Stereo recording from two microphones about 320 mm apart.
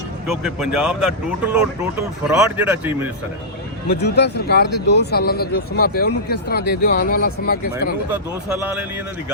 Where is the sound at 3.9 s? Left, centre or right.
Left.